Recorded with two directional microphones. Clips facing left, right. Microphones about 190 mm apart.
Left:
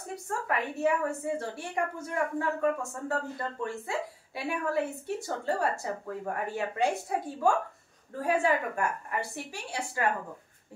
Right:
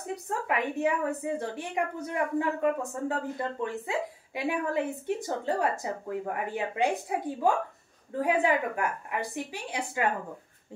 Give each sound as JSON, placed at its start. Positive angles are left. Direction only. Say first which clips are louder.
{"t": 0.3, "sound": "a woman's voice", "louder": "right 2 dB", "side_deg": -15}